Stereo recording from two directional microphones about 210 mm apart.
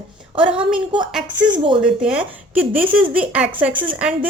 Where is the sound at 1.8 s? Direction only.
5° right (ahead or behind).